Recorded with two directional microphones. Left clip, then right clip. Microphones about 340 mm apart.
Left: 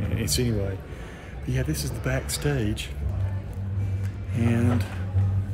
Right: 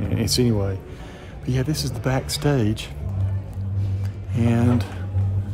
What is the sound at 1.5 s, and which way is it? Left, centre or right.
Speech, right.